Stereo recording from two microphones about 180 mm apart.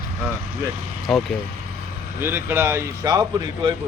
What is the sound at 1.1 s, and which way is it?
Speech, centre (ahead or behind).